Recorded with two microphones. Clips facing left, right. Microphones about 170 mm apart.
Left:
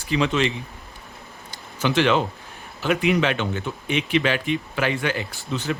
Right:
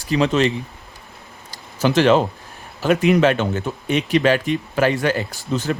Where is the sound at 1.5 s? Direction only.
40° right (ahead or behind).